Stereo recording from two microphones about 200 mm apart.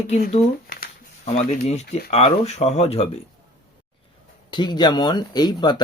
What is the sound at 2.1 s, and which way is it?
Speech, 30° left (ahead or behind).